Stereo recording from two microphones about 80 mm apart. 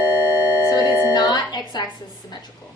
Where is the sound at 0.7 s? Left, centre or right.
Left.